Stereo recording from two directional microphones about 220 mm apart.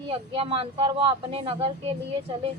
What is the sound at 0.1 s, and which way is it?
A woman's voice, 25° right (ahead or behind).